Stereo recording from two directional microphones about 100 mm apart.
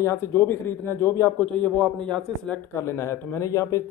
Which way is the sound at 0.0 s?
30° left (ahead or behind).